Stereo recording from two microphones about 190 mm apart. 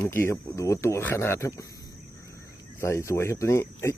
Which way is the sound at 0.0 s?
10° left (ahead or behind).